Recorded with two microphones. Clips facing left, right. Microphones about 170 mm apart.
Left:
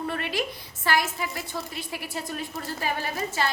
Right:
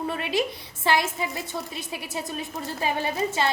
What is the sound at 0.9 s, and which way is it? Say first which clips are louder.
A woman's voice: right 2 dB; 25° right (ahead or behind).